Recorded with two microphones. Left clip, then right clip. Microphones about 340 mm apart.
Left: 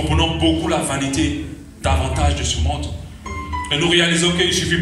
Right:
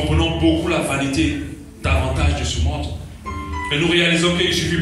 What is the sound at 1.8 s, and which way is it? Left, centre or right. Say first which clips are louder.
Speech: left 2 dB; left.